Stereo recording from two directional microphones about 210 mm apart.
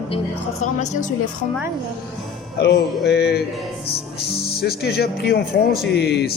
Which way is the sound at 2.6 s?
50° left (ahead or behind).